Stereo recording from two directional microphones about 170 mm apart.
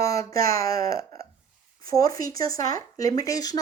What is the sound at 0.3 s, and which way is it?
Speech, 55° right (ahead or behind).